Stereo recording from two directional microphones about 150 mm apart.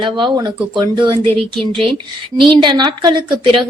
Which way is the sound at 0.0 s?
30° right (ahead or behind).